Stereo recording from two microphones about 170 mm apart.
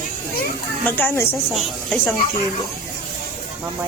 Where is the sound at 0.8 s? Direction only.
10° left (ahead or behind).